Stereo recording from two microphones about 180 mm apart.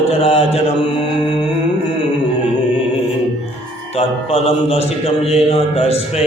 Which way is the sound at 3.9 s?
30° left (ahead or behind).